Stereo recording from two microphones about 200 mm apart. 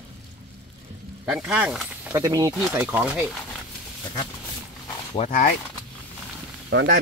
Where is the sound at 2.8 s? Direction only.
5° right (ahead or behind).